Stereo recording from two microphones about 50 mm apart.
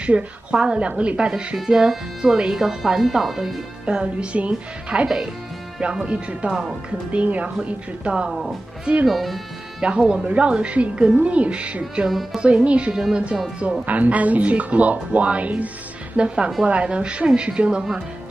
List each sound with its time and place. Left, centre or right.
0.0 s speech: right; by 3.5 s centre
3.8 s speech: right
5.0 s speech: centre
6.0 s speech: right
8.3 s speech: centre
9.8 s speech: centre
12.1 s speech: centre
12.4 s speech: right
12.9 s speech: centre
13.6 s speech: right
16.2 s speech: centre